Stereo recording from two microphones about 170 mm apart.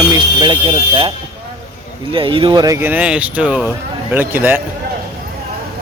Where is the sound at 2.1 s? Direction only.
30° right (ahead or behind); by 4.6 s 10° right (ahead or behind).